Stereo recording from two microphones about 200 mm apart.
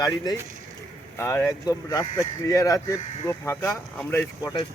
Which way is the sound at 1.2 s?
10° left (ahead or behind).